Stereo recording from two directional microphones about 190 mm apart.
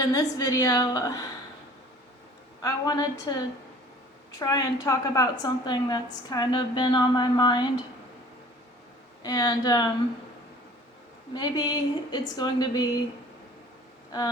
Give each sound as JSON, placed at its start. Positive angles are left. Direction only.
{"t": 0.1, "sound": "a woman's voice", "side_deg": 20}
{"t": 2.6, "sound": "a woman's voice", "side_deg": 20}
{"t": 9.2, "sound": "a woman's voice", "side_deg": 20}
{"t": 11.3, "sound": "a woman's voice", "side_deg": 20}